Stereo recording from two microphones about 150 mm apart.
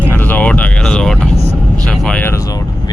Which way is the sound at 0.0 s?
10° left (ahead or behind).